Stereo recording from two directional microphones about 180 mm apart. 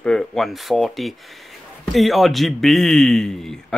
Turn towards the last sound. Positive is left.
turn(degrees=0)  # may be behind; listen again after turning